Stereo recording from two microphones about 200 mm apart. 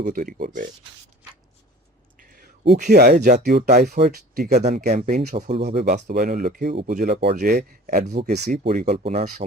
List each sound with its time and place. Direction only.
0.0 s speech: 40° right (ahead or behind)
2.1 s a sound: 45° right (ahead or behind)
3.4 s speech: 55° right (ahead or behind)
4.6 s speech: 40° right (ahead or behind)
5.6 s speech: 55° right (ahead or behind); by 9.2 s 30° right (ahead or behind)